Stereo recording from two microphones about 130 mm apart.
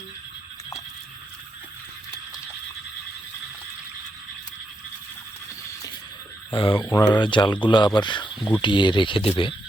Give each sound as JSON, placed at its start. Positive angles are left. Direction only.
{"t": 6.5, "sound": "speech", "side_deg": 45}